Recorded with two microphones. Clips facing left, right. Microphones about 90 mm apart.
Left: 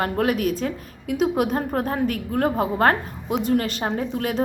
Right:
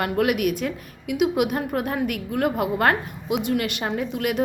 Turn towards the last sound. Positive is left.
turn(degrees=35)  # may be behind; listen again after turning